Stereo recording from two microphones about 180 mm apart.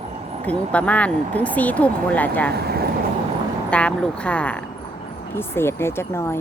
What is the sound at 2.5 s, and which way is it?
Speech, 60° right (ahead or behind).